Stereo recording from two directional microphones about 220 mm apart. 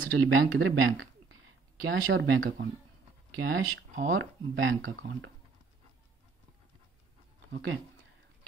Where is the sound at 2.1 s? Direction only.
55° right (ahead or behind).